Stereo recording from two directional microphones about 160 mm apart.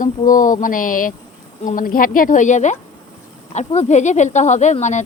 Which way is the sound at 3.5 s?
45° left (ahead or behind).